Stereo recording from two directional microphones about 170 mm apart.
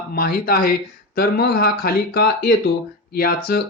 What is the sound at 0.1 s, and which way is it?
Speech, 60° left (ahead or behind).